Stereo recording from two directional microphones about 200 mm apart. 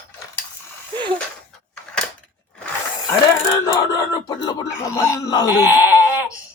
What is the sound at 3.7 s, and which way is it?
Speech, 20° left (ahead or behind).